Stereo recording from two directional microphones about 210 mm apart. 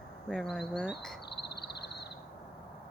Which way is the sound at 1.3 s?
50° left (ahead or behind).